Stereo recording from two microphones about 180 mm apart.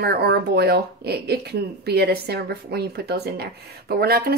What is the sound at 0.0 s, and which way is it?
Speech, 65° right (ahead or behind).